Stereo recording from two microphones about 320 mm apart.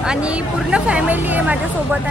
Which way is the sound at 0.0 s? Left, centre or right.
Centre.